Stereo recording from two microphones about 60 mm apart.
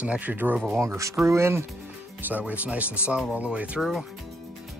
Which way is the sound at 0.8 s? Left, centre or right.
Right.